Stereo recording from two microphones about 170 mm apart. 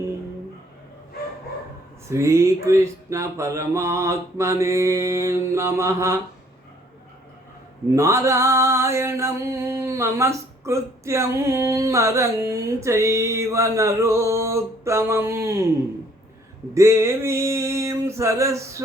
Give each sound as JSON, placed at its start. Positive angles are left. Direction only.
{"t": 2.0, "sound": "mantra", "side_deg": -15}
{"t": 7.9, "sound": "mantra", "side_deg": -15}
{"t": 16.7, "sound": "mantra", "side_deg": -15}